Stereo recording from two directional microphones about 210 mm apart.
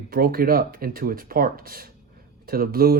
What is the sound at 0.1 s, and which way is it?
Speech, 45° right (ahead or behind).